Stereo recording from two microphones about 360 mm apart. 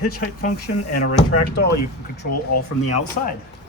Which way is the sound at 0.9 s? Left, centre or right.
Left.